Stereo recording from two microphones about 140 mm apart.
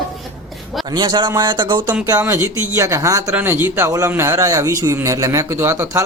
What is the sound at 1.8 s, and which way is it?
Speech, 20° right (ahead or behind).